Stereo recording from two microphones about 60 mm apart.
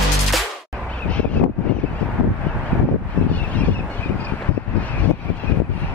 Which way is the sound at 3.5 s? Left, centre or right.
Left.